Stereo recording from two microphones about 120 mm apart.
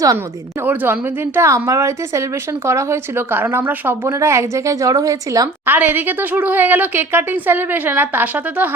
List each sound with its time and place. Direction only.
0.6 s a woman's voice: 15° right (ahead or behind)
5.6 s a woman's voice: 15° right (ahead or behind)